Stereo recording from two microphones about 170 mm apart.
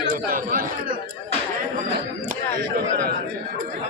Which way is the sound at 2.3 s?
70° right (ahead or behind).